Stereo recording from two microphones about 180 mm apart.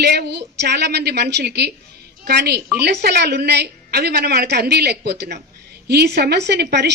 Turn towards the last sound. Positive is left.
turn(degrees=-65)  # may be behind; listen again after turning